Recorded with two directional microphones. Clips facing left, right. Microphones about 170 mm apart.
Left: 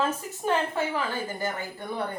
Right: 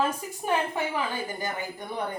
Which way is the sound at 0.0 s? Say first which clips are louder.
Even; 15° right (ahead or behind).